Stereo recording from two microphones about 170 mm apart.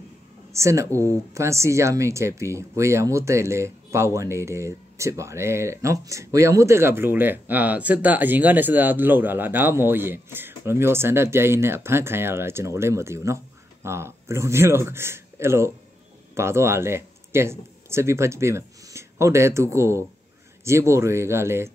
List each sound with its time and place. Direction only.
0.5 s speech: 15° right (ahead or behind)